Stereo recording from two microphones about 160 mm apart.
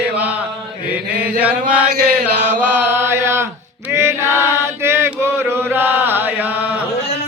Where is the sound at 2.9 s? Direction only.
15° right (ahead or behind).